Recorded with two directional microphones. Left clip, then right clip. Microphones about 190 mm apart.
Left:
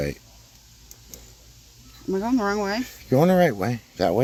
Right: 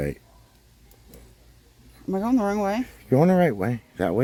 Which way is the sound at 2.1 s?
45° right (ahead or behind).